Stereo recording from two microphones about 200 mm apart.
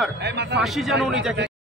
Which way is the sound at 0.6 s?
Centre (ahead or behind).